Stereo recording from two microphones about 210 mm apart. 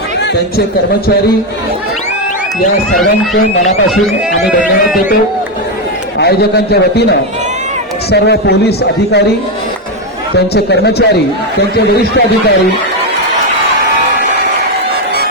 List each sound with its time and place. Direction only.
3.8 s speech: centre (ahead or behind)
6.1 s a man's voice: 50° left (ahead or behind)
10.3 s a man's voice: 55° left (ahead or behind)